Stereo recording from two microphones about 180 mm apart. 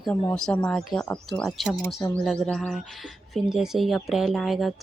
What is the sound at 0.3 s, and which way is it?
Speech, 5° left (ahead or behind).